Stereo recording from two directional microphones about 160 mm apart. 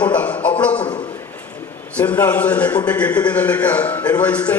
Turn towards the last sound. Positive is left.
turn(degrees=10)  # may be behind; listen again after turning